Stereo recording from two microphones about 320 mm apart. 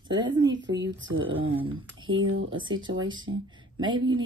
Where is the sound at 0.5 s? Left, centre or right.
Right.